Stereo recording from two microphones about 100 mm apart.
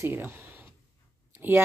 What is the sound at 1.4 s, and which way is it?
Speech, 20° right (ahead or behind).